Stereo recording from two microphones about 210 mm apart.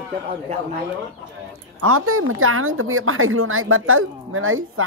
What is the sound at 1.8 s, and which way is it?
A woman's voice, 90° right.